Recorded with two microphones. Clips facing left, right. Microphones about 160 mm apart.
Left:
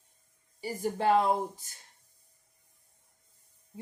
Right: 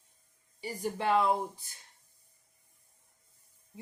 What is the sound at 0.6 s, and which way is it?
Speech, 40° left (ahead or behind).